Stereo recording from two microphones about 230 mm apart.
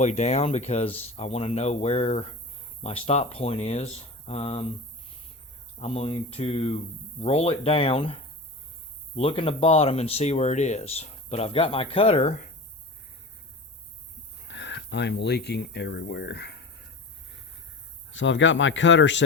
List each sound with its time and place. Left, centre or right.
0.0 s speech: left
5.8 s speech: left
14.4 s speech: left
18.1 s speech: left